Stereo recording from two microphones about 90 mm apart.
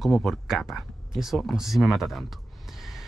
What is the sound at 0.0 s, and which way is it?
Speech, centre (ahead or behind).